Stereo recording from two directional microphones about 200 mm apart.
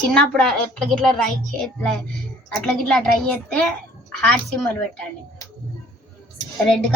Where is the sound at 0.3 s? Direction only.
Centre (ahead or behind).